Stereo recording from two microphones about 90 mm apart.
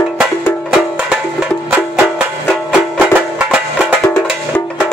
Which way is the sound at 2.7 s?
10° right (ahead or behind).